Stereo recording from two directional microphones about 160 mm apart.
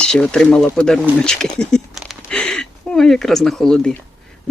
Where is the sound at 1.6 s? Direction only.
5° left (ahead or behind).